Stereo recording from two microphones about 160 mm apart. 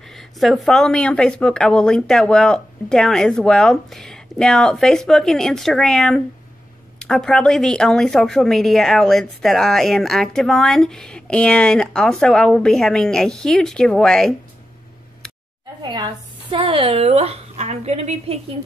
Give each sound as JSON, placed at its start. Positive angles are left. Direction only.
{"t": 0.1, "sound": "speech", "side_deg": 0}
{"t": 15.8, "sound": "a woman's voice", "side_deg": -25}